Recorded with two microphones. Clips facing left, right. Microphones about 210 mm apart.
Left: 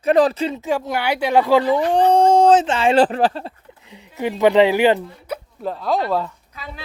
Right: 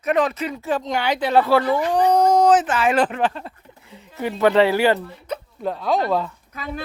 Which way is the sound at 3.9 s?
15° left (ahead or behind).